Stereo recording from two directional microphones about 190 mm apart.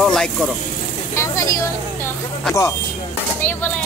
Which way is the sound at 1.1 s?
15° left (ahead or behind).